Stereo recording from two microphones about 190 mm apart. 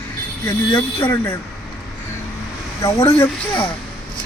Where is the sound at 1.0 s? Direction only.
10° left (ahead or behind).